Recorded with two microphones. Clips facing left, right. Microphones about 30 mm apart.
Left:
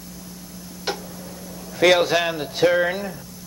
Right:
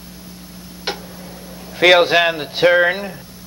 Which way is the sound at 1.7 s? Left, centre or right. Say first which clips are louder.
Right 5 dB; right.